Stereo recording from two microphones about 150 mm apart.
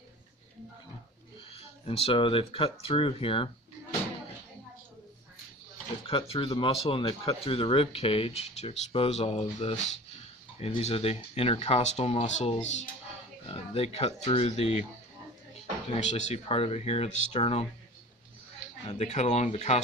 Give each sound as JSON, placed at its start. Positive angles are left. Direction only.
{"t": 1.5, "sound": "speech", "side_deg": 40}
{"t": 6.1, "sound": "speech", "side_deg": 40}
{"t": 16.0, "sound": "speech", "side_deg": 50}
{"t": 18.9, "sound": "speech", "side_deg": 50}